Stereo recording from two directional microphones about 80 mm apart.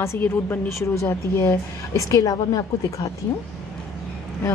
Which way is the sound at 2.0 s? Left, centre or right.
Left.